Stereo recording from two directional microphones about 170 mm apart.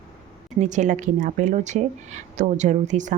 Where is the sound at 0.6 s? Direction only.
45° right (ahead or behind).